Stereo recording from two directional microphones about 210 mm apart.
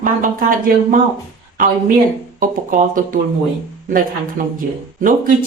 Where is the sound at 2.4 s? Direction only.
40° right (ahead or behind).